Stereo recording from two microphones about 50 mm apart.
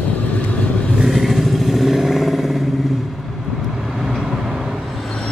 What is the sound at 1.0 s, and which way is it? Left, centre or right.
Vehicle, centre.